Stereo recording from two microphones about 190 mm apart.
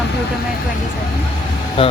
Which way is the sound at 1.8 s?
25° left (ahead or behind).